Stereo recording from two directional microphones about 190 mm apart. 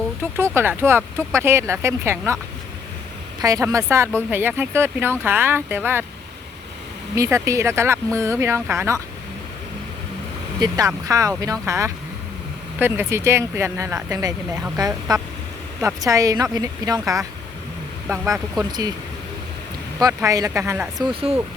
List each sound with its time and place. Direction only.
0.3 s speech: 15° right (ahead or behind)
3.4 s speech: 15° right (ahead or behind)
7.2 s speech: 15° right (ahead or behind)
10.6 s speech: 20° right (ahead or behind)
20.0 s speech: 20° right (ahead or behind)
21.1 s speech: 30° right (ahead or behind)